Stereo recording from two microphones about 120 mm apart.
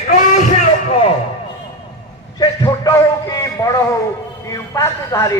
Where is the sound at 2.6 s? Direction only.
25° left (ahead or behind).